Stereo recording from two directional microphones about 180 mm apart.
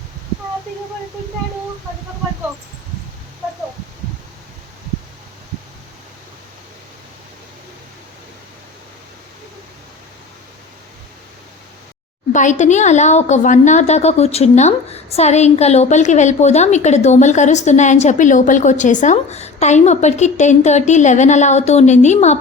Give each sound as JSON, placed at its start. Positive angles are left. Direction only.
{"t": 12.3, "sound": "a woman's voice", "side_deg": 45}